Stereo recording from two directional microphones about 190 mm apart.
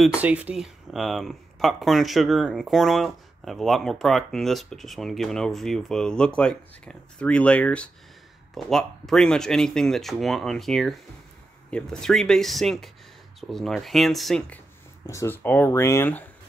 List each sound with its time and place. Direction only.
0.0 s speech: 5° right (ahead or behind)
15.0 s speech: 15° left (ahead or behind)